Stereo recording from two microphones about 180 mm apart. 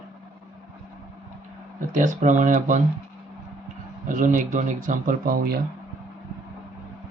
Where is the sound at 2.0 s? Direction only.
45° right (ahead or behind).